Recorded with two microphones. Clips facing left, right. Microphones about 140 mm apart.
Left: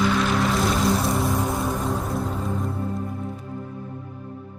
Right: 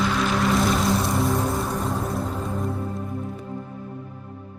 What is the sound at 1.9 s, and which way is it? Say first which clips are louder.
Music: even; centre (ahead or behind).